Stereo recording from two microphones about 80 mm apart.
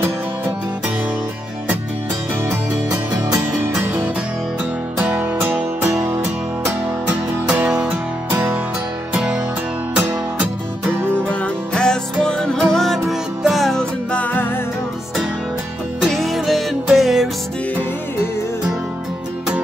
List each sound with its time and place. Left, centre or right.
4.9 s music: centre
5.8 s music: right
7.1 s music: centre
11.4 s music: centre
14.1 s music: left
16.0 s music: centre